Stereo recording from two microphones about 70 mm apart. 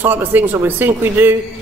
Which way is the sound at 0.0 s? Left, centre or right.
Right.